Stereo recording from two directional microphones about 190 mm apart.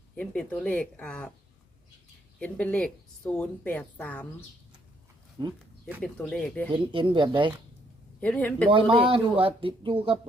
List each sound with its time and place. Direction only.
0.2 s a woman's voice: 5° left (ahead or behind)
2.4 s a woman's voice: 5° left (ahead or behind)
5.4 s speech: 20° right (ahead or behind)
6.0 s speech: 5° left (ahead or behind)
6.7 s speech: 25° right (ahead or behind)
8.2 s a woman's voice: 5° left (ahead or behind)
8.7 s speech: 25° right (ahead or behind)